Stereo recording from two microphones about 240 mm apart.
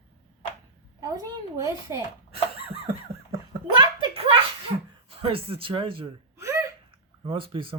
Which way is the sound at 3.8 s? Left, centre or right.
Right.